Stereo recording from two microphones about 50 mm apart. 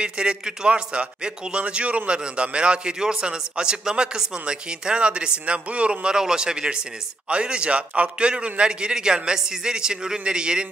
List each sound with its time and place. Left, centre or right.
0.0 s a man's voice: centre